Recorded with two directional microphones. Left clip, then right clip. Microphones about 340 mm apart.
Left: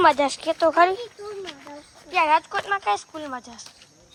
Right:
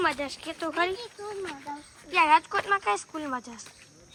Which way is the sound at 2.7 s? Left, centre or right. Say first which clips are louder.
Left 3 dB; centre.